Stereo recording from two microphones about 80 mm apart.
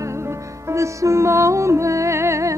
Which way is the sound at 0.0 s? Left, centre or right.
Right.